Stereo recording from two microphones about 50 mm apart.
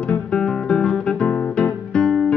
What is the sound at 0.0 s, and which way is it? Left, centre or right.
Music, left.